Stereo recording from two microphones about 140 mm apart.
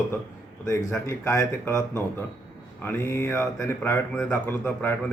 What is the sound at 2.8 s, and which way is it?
A man's voice, 15° left (ahead or behind).